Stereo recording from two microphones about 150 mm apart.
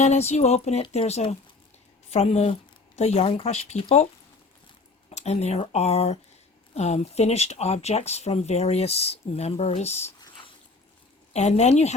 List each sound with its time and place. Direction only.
0.0 s speech: 45° left (ahead or behind)
11.3 s speech: 50° left (ahead or behind)